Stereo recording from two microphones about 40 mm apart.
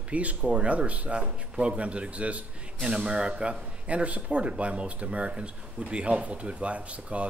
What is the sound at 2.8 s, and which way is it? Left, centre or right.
Speech, right.